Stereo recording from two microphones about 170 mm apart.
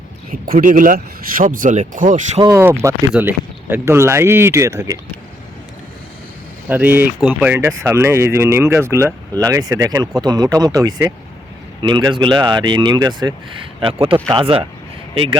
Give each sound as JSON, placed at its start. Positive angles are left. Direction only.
{"t": 0.3, "sound": "speech", "side_deg": -55}
{"t": 2.4, "sound": "speech", "side_deg": -15}
{"t": 6.7, "sound": "speech", "side_deg": -10}